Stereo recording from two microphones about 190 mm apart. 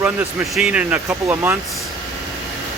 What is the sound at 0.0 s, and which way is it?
Speech, 10° right (ahead or behind).